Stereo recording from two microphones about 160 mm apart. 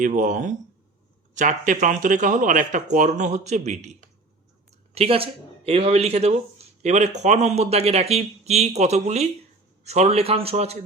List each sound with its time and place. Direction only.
0.0 s speech: 50° right (ahead or behind)
4.9 s speech: 35° right (ahead or behind)